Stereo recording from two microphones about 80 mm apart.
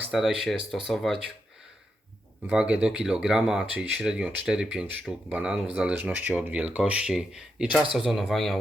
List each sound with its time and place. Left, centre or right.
0.1 s speech: centre
2.5 s speech: centre